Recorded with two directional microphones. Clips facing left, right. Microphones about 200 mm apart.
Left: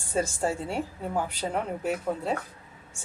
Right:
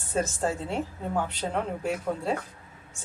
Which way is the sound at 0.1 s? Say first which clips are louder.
Even; 10° left (ahead or behind).